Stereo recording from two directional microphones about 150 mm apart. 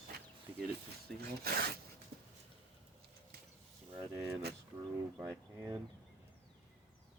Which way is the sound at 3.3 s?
90° right.